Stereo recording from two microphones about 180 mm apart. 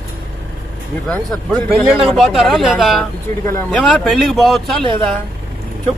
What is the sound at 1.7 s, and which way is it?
Speech, 5° right (ahead or behind).